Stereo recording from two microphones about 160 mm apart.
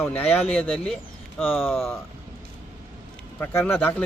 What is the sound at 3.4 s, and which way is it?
Speech, 15° left (ahead or behind).